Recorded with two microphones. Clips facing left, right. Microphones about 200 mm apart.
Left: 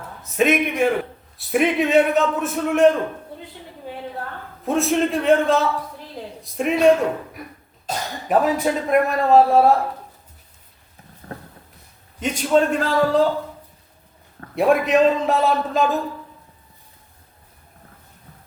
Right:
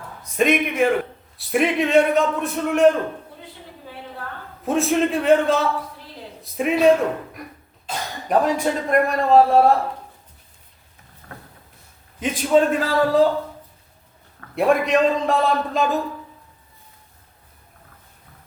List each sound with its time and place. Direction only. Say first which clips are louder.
0.2 s a man's voice: left 1 dB; 5° left (ahead or behind)
4.6 s a man's voice: even; centre (ahead or behind)
11.2 s a sound: left 6 dB; 30° left (ahead or behind)
12.2 s a man's voice: right 1 dB; centre (ahead or behind)
14.5 s a man's voice: left 1 dB; centre (ahead or behind)